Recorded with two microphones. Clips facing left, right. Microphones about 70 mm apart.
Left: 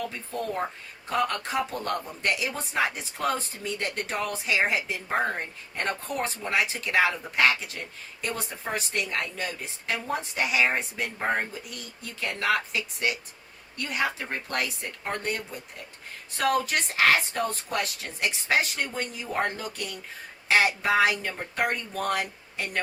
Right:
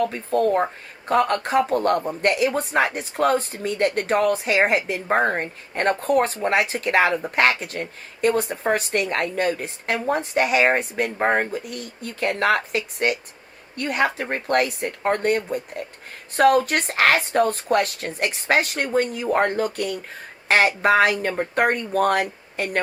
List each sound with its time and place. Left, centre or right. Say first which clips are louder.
0.0 s speech: right 12 dB; right